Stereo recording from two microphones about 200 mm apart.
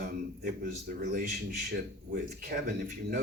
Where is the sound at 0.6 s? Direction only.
40° right (ahead or behind).